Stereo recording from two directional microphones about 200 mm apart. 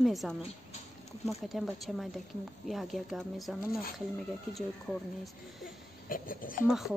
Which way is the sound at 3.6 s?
50° left (ahead or behind).